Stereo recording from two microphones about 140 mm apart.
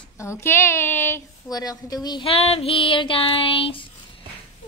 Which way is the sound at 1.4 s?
25° left (ahead or behind).